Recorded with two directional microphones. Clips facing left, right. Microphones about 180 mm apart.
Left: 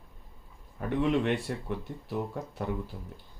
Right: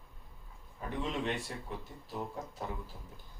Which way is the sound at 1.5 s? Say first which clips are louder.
Left 8 dB; 65° left (ahead or behind).